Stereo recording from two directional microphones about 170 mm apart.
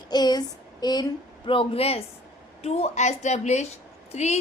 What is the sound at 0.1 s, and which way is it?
A woman's voice, 25° left (ahead or behind).